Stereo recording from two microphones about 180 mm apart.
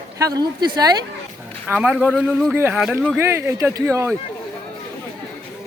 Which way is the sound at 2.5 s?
10° right (ahead or behind).